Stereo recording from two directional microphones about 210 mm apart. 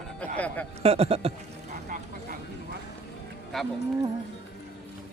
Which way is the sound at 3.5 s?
Centre (ahead or behind).